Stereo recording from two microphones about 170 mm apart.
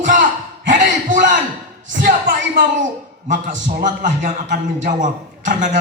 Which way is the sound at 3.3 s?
45° right (ahead or behind).